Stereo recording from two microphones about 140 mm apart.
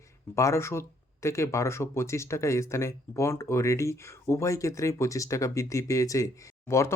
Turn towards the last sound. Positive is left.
turn(degrees=20)  # may be behind; listen again after turning